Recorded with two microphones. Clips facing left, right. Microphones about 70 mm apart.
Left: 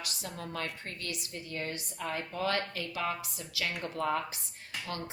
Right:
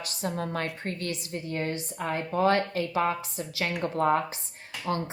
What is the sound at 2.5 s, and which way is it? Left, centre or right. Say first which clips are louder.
A woman's voice: right 8 dB; right.